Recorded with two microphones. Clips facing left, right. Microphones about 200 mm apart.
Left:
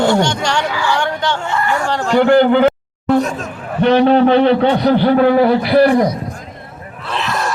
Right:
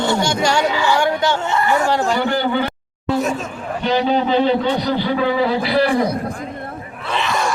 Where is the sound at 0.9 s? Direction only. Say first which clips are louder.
Right 1 dB; 10° right (ahead or behind).